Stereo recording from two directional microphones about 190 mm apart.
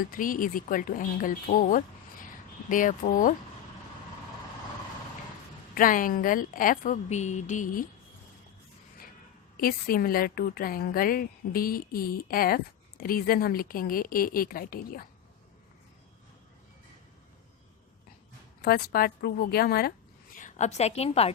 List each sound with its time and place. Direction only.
0.1 s speech: 45° left (ahead or behind)
5.7 s a woman's voice: 45° left (ahead or behind)
9.6 s a woman's voice: 50° left (ahead or behind)
18.6 s a woman's voice: 55° left (ahead or behind)
20.3 s a woman's voice: 40° left (ahead or behind)